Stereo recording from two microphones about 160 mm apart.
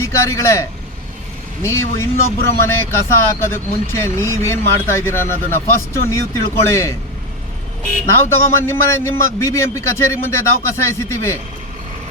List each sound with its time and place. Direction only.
0.0 s a man's voice: 20° left (ahead or behind)
8.0 s a man's voice: 15° left (ahead or behind)